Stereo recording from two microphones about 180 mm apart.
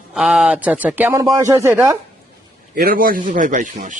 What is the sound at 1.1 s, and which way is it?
Speech, 20° right (ahead or behind).